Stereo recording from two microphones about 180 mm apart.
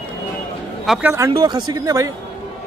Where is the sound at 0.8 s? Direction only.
Centre (ahead or behind).